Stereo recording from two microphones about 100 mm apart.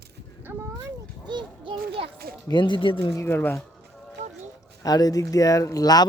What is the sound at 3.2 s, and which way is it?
Speech, 20° left (ahead or behind).